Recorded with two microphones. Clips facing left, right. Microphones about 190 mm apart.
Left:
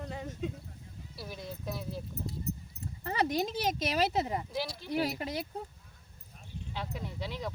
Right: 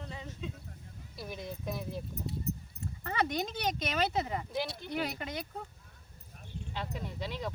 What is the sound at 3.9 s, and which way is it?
Speech, 35° left (ahead or behind).